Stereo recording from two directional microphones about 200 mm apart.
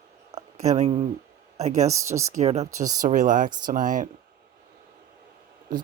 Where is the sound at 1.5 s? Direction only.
35° right (ahead or behind).